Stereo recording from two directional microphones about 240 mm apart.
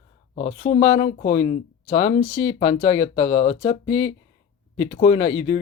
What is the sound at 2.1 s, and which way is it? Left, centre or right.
Speech, left.